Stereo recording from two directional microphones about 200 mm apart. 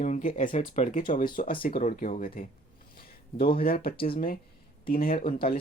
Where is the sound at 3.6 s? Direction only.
50° left (ahead or behind).